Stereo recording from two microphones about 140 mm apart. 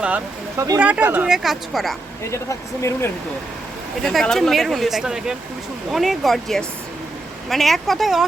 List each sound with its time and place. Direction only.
0.5 s speech: 25° right (ahead or behind)
0.8 s speech: 10° right (ahead or behind)
2.2 s speech: 20° left (ahead or behind)
4.0 s speech: centre (ahead or behind)